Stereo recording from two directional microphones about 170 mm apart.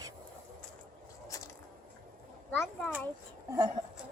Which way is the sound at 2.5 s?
15° left (ahead or behind).